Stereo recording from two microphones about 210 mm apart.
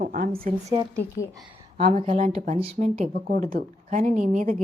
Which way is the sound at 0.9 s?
5° left (ahead or behind).